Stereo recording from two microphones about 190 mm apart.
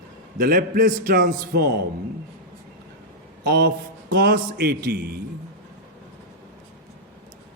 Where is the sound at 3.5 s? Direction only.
55° right (ahead or behind).